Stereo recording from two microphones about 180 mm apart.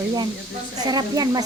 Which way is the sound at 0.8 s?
20° right (ahead or behind).